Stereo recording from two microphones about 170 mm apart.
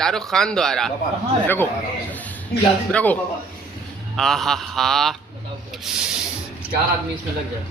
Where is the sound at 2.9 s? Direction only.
10° left (ahead or behind).